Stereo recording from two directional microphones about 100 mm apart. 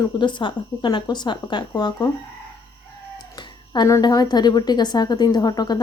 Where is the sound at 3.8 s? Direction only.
35° left (ahead or behind).